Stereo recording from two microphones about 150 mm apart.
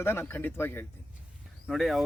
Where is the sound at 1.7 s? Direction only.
Centre (ahead or behind).